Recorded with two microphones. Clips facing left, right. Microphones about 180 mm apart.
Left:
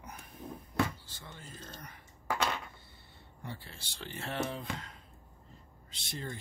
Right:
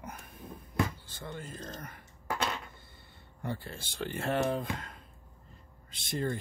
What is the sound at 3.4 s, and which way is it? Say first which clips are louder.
Speech: right 8 dB; 50° right (ahead or behind).